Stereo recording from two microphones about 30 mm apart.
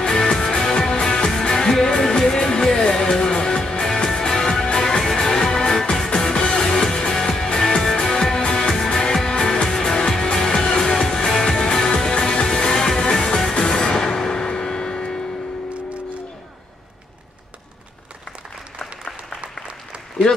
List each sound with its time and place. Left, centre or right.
0.0 s music: left
11.5 s music: left